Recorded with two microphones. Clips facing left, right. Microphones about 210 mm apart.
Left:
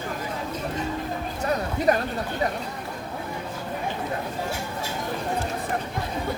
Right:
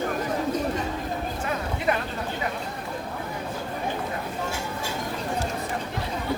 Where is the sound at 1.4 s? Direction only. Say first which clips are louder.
Left 6 dB; 40° left (ahead or behind).